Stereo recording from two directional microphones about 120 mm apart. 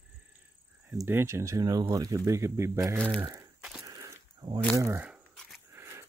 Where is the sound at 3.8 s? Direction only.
30° right (ahead or behind).